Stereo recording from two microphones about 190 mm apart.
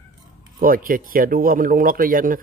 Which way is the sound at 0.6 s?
50° right (ahead or behind).